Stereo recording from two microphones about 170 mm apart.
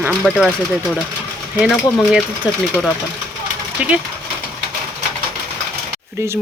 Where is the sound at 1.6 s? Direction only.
5° right (ahead or behind).